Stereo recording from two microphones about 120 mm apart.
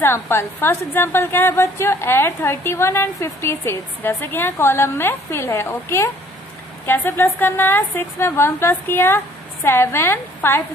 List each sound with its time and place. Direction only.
0.0 s a woman's voice: 20° left (ahead or behind)